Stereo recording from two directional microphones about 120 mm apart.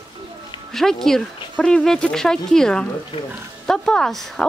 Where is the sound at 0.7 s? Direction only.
5° left (ahead or behind).